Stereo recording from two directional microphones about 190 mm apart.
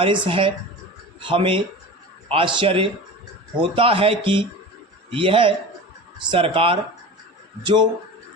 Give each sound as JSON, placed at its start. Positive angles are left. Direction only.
{"t": 0.0, "sound": "speech", "side_deg": -30}